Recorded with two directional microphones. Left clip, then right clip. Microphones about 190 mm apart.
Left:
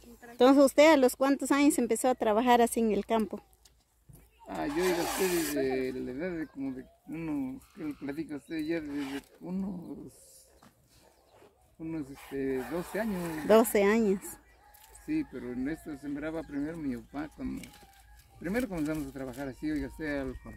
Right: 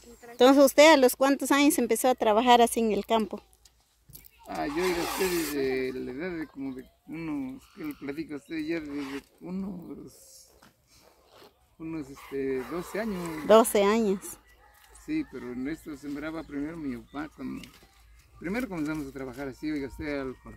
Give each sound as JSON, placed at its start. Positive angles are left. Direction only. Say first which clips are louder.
{"t": 0.4, "sound": "speech", "louder": "right 3 dB", "side_deg": -10}
{"t": 4.6, "sound": "speech", "louder": "right 1 dB", "side_deg": 20}
{"t": 5.6, "sound": "speech", "louder": "right 2 dB", "side_deg": -10}
{"t": 11.8, "sound": "speech", "louder": "right 1 dB", "side_deg": -5}